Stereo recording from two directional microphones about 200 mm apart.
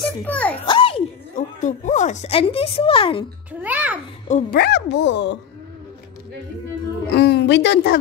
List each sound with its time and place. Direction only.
0.2 s a child's voice: 5° left (ahead or behind)
0.7 s a sound: 25° left (ahead or behind)
1.3 s speech: 40° left (ahead or behind)
3.6 s a child's voice: 5° right (ahead or behind)
4.3 s speech: 45° left (ahead or behind); by 5.4 s 60° left (ahead or behind)
7.2 s speech: 55° left (ahead or behind)